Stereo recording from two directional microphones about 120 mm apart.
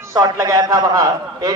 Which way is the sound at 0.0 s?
25° right (ahead or behind).